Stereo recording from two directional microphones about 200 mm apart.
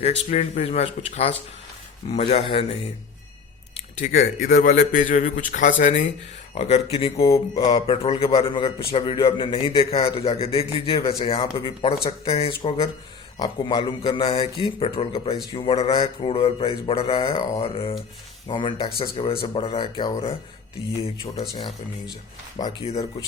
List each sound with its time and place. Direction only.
0.0 s a man's voice: 35° left (ahead or behind)
4.0 s a man's voice: 45° left (ahead or behind)
7.3 s mantra: 15° left (ahead or behind)
7.7 s a man's voice: 30° left (ahead or behind)